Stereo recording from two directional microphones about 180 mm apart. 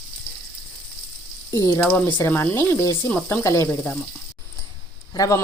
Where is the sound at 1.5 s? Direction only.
15° left (ahead or behind).